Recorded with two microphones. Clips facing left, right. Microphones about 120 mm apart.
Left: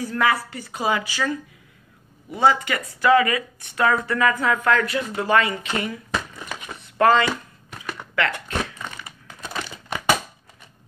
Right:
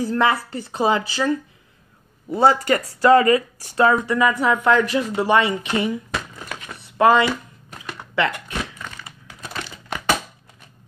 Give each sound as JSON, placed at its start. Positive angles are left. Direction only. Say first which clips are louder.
{"t": 0.0, "sound": "speech", "louder": "right 3 dB", "side_deg": -25}
{"t": 2.3, "sound": "speech", "louder": "right 3 dB", "side_deg": -35}
{"t": 7.0, "sound": "speech", "louder": "right 2 dB", "side_deg": -15}
{"t": 9.5, "sound": "crumpling", "louder": "even", "side_deg": 10}